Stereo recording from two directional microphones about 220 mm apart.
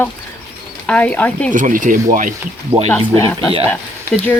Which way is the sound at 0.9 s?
5° left (ahead or behind).